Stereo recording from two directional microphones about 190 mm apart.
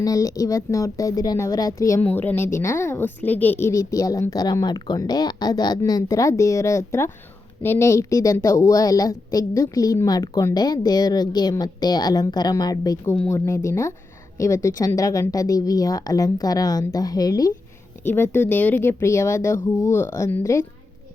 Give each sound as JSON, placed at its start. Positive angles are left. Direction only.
{"t": 0.0, "sound": "a woman's voice", "side_deg": 20}